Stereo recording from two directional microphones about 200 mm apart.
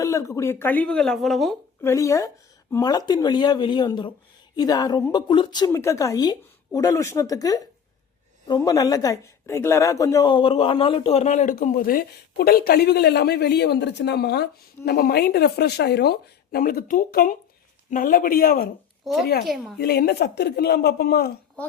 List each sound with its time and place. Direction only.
0.0 s speech: 15° left (ahead or behind)
1.8 s a woman's voice: 15° left (ahead or behind); by 19.5 s 50° left (ahead or behind)
19.5 s a woman's voice: centre (ahead or behind)
19.8 s speech: 50° left (ahead or behind)